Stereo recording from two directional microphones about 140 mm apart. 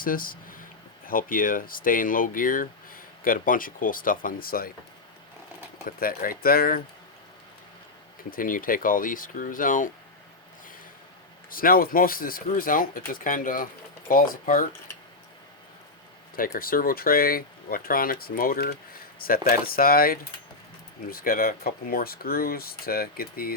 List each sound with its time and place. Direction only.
0.0 s speech: 90° left
6.0 s speech: 90° left
8.3 s speech: 80° left
11.5 s speech: 90° left
16.3 s speech: 90° left